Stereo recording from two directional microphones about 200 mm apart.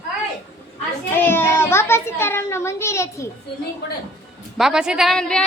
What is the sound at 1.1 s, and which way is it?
A child's voice, 10° left (ahead or behind).